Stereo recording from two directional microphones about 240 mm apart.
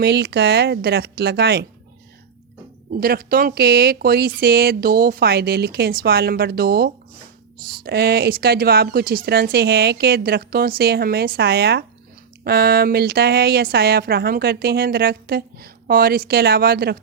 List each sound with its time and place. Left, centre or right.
0.0 s speech: right
2.9 s speech: right